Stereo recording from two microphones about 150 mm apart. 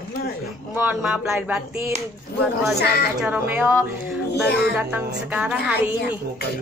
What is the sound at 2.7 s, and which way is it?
Speech, 90° left.